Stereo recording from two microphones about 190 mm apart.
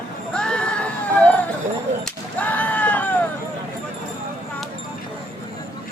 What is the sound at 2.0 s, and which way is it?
Whip, 10° left (ahead or behind).